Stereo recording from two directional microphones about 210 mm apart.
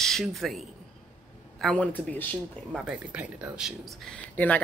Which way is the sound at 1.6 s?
5° left (ahead or behind).